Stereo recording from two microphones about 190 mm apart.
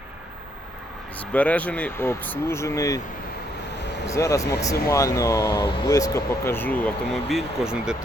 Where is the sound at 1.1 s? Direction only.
5° left (ahead or behind).